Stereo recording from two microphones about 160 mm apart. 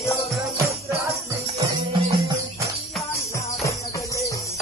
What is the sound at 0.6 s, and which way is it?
Jingle bell, 20° right (ahead or behind).